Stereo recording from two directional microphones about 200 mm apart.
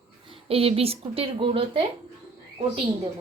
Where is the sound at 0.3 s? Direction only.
30° right (ahead or behind).